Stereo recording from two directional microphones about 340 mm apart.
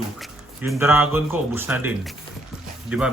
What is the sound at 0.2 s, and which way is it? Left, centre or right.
Speech, centre.